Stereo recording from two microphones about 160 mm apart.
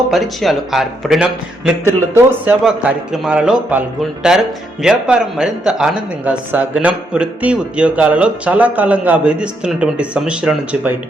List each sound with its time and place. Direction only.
0.1 s a man's voice: centre (ahead or behind)